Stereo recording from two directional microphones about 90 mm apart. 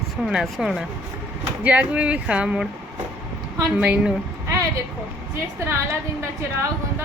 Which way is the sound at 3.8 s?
15° right (ahead or behind).